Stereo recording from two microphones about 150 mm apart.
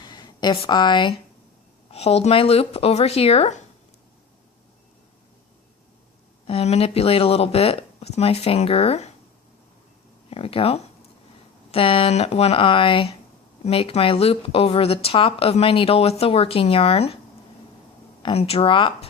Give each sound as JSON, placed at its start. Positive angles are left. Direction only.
{"t": 0.0, "sound": "a sound", "side_deg": 30}
{"t": 1.9, "sound": "speech", "side_deg": 45}
{"t": 6.5, "sound": "speech", "side_deg": 45}
{"t": 10.2, "sound": "speech", "side_deg": 40}
{"t": 18.2, "sound": "speech", "side_deg": 40}